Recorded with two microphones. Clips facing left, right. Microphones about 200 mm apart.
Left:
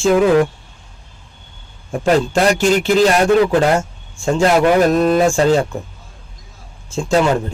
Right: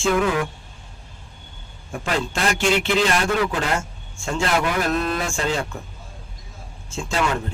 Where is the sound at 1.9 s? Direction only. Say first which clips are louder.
Left 10 dB; 40° left (ahead or behind).